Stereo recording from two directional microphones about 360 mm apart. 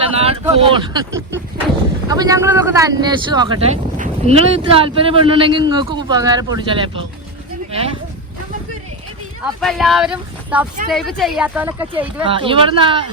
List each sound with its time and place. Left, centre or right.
0.2 s speech: centre
9.4 s speech: centre